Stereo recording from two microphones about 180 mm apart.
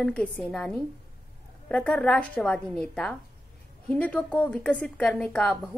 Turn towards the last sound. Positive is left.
turn(degrees=5)  # may be behind; listen again after turning